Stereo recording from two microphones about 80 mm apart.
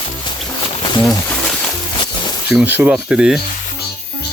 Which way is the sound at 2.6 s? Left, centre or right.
Centre.